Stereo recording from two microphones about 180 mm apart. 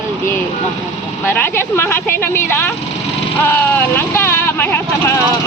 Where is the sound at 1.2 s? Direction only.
10° left (ahead or behind).